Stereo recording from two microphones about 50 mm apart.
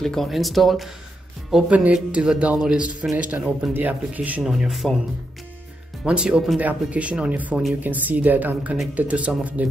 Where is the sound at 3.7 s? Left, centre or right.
Right.